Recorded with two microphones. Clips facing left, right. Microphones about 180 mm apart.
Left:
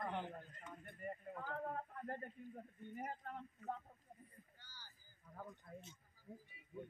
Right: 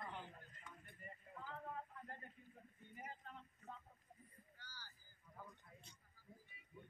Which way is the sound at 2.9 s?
55° left (ahead or behind).